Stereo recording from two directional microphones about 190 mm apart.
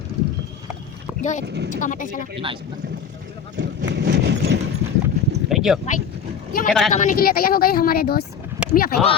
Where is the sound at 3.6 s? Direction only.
65° right (ahead or behind).